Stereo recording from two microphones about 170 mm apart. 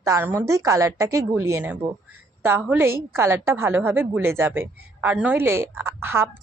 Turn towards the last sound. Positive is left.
turn(degrees=-15)  # may be behind; listen again after turning